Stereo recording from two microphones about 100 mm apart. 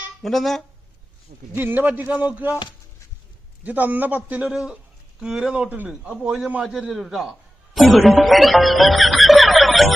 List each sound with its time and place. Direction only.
0.2 s speech: centre (ahead or behind)
1.5 s a man's voice: 20° right (ahead or behind)
3.6 s a man's voice: 15° right (ahead or behind); by 9.9 s centre (ahead or behind)